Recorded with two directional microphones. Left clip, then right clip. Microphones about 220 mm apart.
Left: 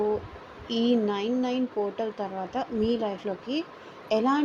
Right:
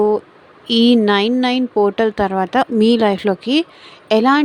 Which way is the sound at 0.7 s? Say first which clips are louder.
Right 13 dB; 40° right (ahead or behind).